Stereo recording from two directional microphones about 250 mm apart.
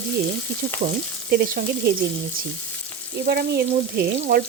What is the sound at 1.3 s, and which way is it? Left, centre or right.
Frying, right.